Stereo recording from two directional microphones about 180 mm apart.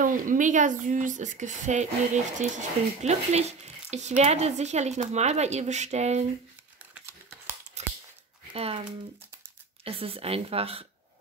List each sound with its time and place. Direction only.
0.0 s a woman's voice: 45° right (ahead or behind)
6.9 s a sound: 10° right (ahead or behind)
7.8 s scissors: 40° right (ahead or behind)
8.5 s speech: 35° right (ahead or behind)
9.8 s speech: 30° right (ahead or behind)